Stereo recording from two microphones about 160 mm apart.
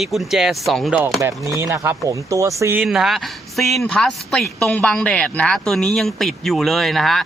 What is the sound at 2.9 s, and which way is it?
Speech, centre (ahead or behind).